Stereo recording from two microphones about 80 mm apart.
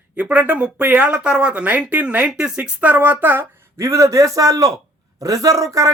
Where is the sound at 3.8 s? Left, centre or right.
Right.